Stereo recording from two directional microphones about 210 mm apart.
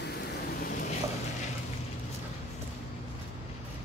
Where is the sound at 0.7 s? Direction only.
40° left (ahead or behind).